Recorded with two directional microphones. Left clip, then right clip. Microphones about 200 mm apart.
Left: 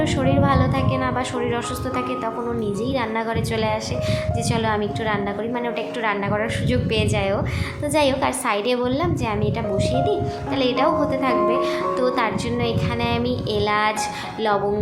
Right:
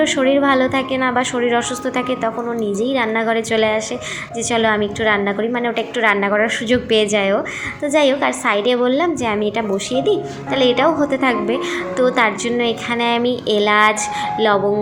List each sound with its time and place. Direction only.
0.0 s a woman's voice: 20° right (ahead or behind)